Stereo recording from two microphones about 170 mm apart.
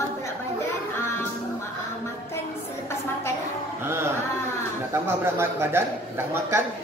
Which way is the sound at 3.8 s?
15° right (ahead or behind).